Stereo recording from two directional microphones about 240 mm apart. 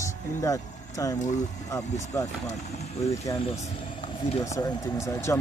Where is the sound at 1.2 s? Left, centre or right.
Left.